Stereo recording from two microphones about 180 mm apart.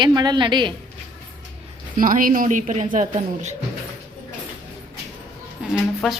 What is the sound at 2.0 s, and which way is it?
Speech, 50° right (ahead or behind).